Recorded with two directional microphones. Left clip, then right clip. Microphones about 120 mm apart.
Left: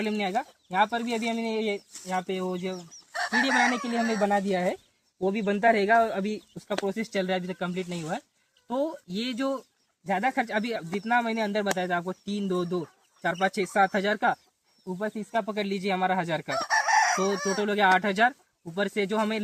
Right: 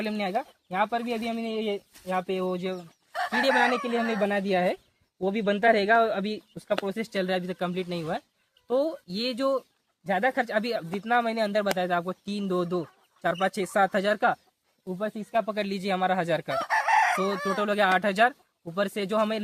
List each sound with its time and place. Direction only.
0.1 s speech: 25° right (ahead or behind)
3.1 s speech: 20° left (ahead or behind)
4.2 s speech: 40° right (ahead or behind)
6.8 s speech: 25° right (ahead or behind)
16.6 s chicken: 15° left (ahead or behind)
17.6 s speech: 25° right (ahead or behind)